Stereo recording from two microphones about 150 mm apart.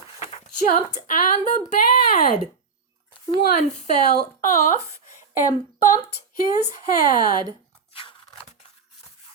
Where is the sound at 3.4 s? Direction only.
55° left (ahead or behind).